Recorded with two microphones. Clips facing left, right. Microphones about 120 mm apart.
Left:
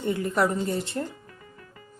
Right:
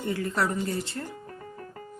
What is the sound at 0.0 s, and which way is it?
Speech, 20° left (ahead or behind).